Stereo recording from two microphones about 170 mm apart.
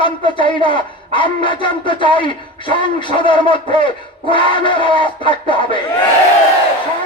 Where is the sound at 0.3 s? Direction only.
30° left (ahead or behind).